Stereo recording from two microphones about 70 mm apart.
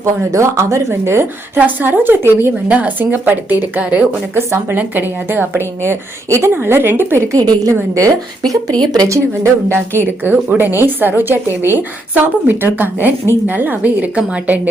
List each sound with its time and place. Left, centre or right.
0.0 s speech: right
1.5 s speech: right
4.4 s a woman's voice: right
7.3 s a woman's voice: right
8.7 s speech: centre
9.0 s a woman's voice: right